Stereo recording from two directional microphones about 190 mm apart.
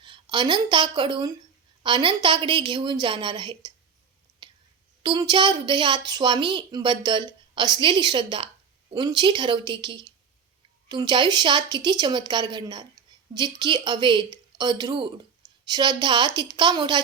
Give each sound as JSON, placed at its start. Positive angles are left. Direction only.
{"t": 0.0, "sound": "a woman's voice", "side_deg": -25}
{"t": 4.4, "sound": "whispering", "side_deg": -25}
{"t": 5.0, "sound": "a woman's voice", "side_deg": -20}